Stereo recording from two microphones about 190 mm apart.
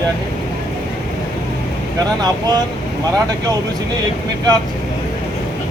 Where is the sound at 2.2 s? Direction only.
20° right (ahead or behind).